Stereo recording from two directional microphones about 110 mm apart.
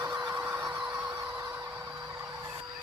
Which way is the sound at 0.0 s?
35° right (ahead or behind).